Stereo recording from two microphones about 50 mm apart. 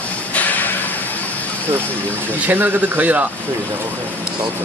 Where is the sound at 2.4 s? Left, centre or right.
Right.